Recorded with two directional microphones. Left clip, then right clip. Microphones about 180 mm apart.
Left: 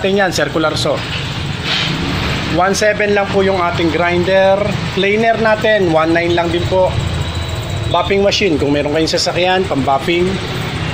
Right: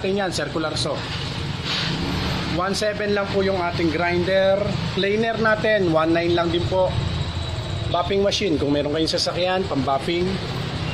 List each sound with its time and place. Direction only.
0.0 s speech: 10° left (ahead or behind)
2.6 s speech: centre (ahead or behind); by 6.4 s 20° right (ahead or behind)
8.1 s speech: 5° right (ahead or behind)